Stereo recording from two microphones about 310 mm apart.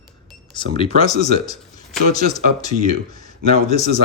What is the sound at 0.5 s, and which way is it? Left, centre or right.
Speech, centre.